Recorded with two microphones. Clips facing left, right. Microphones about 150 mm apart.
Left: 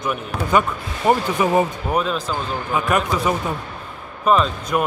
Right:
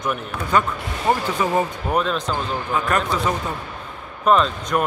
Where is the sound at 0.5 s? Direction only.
15° left (ahead or behind).